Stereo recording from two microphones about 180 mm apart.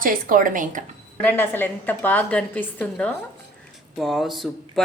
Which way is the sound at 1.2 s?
10° left (ahead or behind).